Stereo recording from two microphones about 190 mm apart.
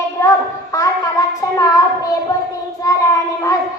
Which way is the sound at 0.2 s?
15° left (ahead or behind).